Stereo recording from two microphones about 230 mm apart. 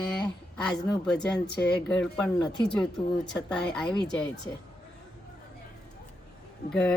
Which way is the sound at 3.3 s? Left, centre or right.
Centre.